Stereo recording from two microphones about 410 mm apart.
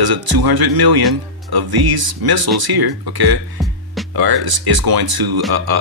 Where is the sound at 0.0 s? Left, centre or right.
Right.